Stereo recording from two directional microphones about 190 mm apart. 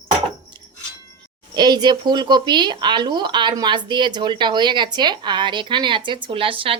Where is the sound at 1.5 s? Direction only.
20° right (ahead or behind).